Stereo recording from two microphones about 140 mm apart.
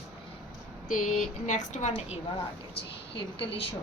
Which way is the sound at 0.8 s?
60° left (ahead or behind).